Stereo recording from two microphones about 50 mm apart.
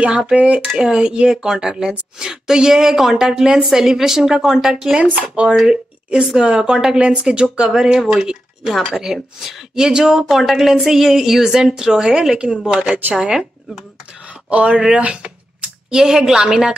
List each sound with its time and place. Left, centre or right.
0.1 s speech: centre
5.1 s speech: right
5.7 s a sound: centre
6.3 s speech: centre
14.5 s speech: right
14.8 s a sound: centre
15.9 s speech: centre